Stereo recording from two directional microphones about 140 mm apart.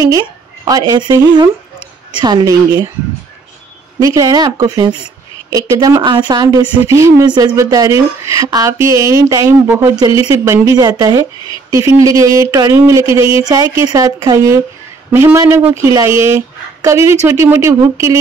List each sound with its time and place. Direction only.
0.7 s speech: 25° right (ahead or behind)
4.0 s speech: 25° right (ahead or behind)